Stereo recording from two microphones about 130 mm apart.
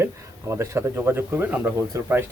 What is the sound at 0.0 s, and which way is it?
A man's voice, 20° right (ahead or behind).